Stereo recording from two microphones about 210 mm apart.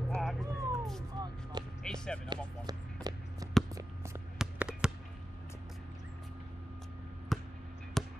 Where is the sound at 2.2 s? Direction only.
20° right (ahead or behind).